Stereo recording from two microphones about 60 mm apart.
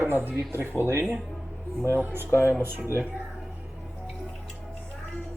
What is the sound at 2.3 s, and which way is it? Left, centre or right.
Speech, left.